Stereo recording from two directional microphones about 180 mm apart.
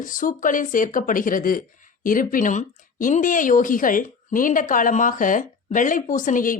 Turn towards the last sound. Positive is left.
turn(degrees=50)  # may be behind; listen again after turning